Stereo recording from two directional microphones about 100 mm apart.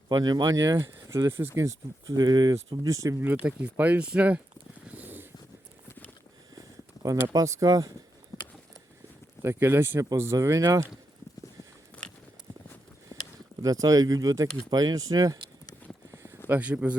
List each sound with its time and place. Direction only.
0.1 s speech: 40° right (ahead or behind)
3.4 s speech: 15° right (ahead or behind)
4.9 s a sound: 20° right (ahead or behind)
6.6 s a sound: 35° right (ahead or behind)
7.3 s speech: 35° right (ahead or behind)
8.3 s a sound: 35° left (ahead or behind)
9.4 s speech: 25° right (ahead or behind)
13.6 s speech: 35° right (ahead or behind)
16.5 s speech: 15° right (ahead or behind)